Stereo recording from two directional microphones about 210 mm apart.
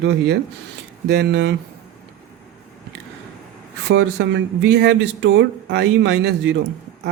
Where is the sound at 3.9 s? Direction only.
55° right (ahead or behind).